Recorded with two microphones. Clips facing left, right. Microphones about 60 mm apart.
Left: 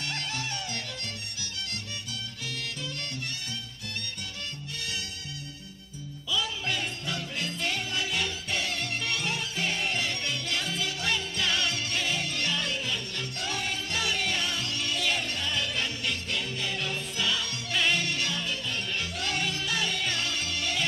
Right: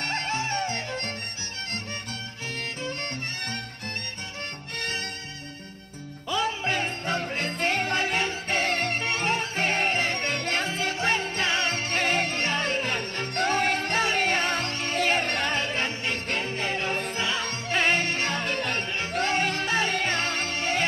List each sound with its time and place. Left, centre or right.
0.0 s music: right
2.6 s music: right
4.8 s music: right
6.2 s music: right
18.9 s music: right